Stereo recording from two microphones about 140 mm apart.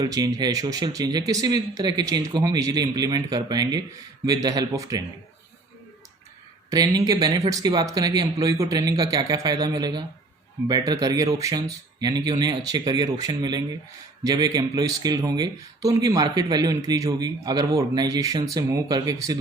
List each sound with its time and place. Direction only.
0.0 s speech: 25° right (ahead or behind)
6.7 s speech: 25° right (ahead or behind)